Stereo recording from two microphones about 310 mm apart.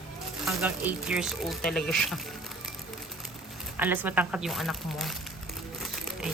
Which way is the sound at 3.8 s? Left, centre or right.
Centre.